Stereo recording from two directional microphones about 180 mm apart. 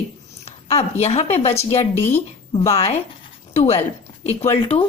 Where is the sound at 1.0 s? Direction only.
35° left (ahead or behind).